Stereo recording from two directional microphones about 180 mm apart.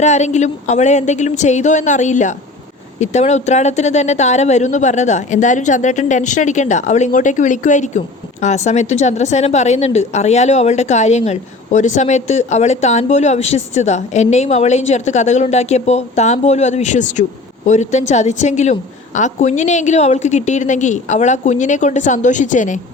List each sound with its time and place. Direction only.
0.0 s speech: 40° left (ahead or behind)